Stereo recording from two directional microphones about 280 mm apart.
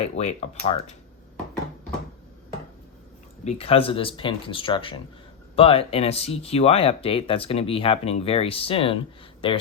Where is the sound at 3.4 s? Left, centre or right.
Left.